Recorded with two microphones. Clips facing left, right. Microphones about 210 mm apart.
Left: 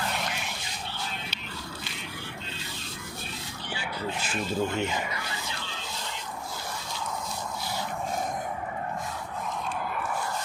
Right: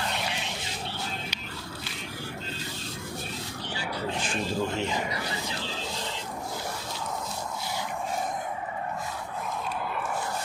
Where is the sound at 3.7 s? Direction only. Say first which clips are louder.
Right 1 dB; 35° right (ahead or behind).